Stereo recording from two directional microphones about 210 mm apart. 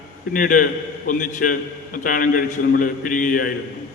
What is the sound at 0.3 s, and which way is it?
A man's voice, 40° left (ahead or behind).